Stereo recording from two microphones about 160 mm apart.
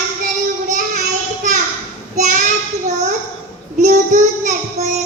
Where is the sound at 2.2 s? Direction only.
50° right (ahead or behind).